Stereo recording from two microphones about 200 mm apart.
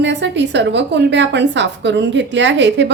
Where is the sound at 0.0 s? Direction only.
60° right (ahead or behind).